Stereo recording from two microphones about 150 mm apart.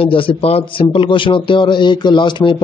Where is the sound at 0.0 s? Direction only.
35° left (ahead or behind).